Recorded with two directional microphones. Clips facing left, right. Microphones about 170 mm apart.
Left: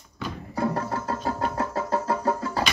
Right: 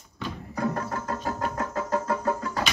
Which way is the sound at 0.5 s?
30° left (ahead or behind).